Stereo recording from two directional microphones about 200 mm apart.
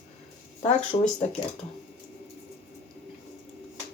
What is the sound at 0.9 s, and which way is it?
Speech, 20° left (ahead or behind).